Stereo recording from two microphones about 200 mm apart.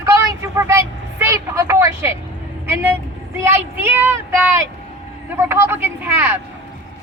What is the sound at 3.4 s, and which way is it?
Speech, 10° right (ahead or behind).